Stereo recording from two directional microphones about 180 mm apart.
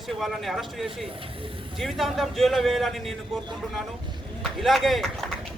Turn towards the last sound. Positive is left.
turn(degrees=0)  # may be behind; listen again after turning